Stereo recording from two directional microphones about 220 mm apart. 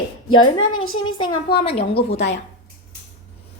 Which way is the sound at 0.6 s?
70° left (ahead or behind).